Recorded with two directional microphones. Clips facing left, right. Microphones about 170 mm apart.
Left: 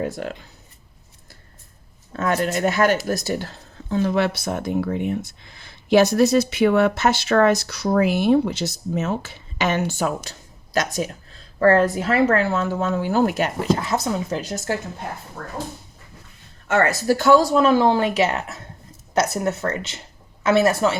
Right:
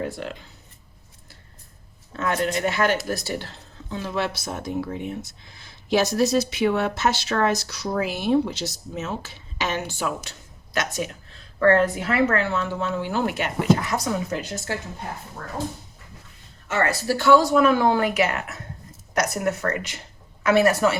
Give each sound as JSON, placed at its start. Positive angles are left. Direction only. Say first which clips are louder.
{"t": 2.1, "sound": "speech", "louder": "left 2 dB", "side_deg": 45}
{"t": 17.1, "sound": "speech", "louder": "left 2 dB", "side_deg": 40}
{"t": 17.5, "sound": "a woman's voice", "louder": "left 2 dB", "side_deg": 30}